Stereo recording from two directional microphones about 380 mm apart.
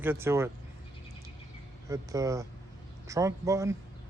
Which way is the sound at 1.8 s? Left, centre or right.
Centre.